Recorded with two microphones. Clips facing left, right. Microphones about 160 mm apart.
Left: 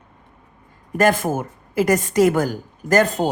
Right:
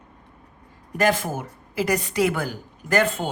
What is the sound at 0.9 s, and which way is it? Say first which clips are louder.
A woman's voice: left 4 dB; 50° left (ahead or behind).